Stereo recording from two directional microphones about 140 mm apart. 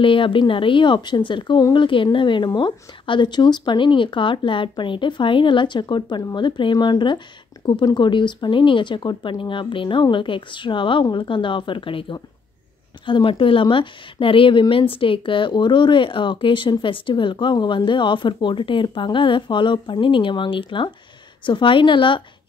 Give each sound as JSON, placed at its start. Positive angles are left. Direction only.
{"t": 0.0, "sound": "speech", "side_deg": 40}